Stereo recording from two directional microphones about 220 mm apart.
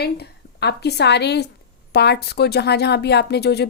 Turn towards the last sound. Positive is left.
turn(degrees=50)  # may be behind; listen again after turning